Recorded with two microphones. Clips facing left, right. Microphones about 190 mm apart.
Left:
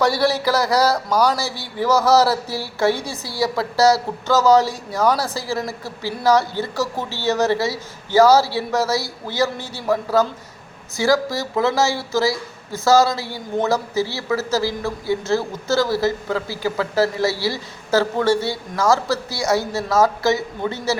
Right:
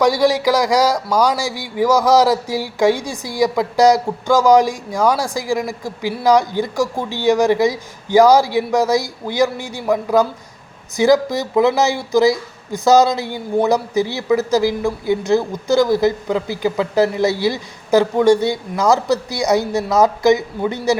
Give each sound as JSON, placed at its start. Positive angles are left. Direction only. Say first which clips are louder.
{"t": 0.0, "sound": "a man's voice", "louder": "right 4 dB", "side_deg": -15}